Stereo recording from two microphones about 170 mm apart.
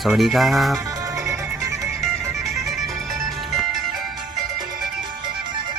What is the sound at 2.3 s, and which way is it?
Music, centre (ahead or behind).